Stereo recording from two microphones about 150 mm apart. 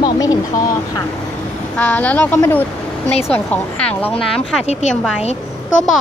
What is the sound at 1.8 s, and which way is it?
A woman's voice, 10° left (ahead or behind).